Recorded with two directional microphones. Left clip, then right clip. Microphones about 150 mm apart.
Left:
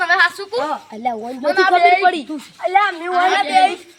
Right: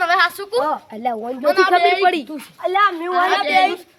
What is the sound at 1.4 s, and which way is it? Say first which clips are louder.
Speech: even; 30° right (ahead or behind).